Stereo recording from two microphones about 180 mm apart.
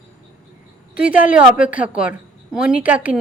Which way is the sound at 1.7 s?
5° right (ahead or behind).